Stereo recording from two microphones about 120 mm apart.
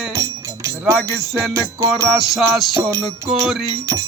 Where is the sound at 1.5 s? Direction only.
25° right (ahead or behind).